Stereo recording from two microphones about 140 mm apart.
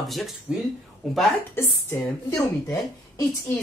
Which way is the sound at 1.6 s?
20° left (ahead or behind).